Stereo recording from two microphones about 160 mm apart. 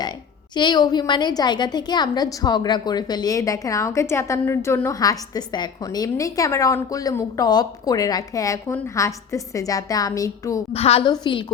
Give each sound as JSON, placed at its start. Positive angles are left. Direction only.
{"t": 0.5, "sound": "a woman's voice", "side_deg": 30}
{"t": 10.7, "sound": "a woman's voice", "side_deg": 40}
{"t": 11.0, "sound": "a woman's voice", "side_deg": 25}